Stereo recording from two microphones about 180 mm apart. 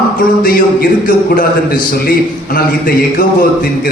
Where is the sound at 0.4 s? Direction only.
50° left (ahead or behind).